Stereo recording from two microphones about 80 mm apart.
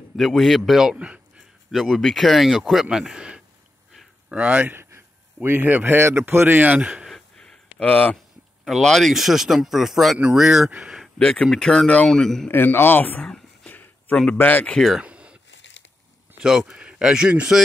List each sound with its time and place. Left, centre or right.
0.1 s speech: centre
1.7 s a man's voice: centre; by 6.8 s right
6.8 s speech: centre
7.1 s a sound: centre
7.8 s a man's voice: centre
8.6 s speech: centre
11.1 s speech: centre
12.4 s a man's voice: left
13.2 s a sound: centre
14.3 s a man's voice: left
15.0 s a sound: centre
16.3 s speech: centre